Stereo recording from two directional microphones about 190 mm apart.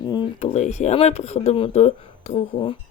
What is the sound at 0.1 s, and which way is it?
Speech, 25° left (ahead or behind).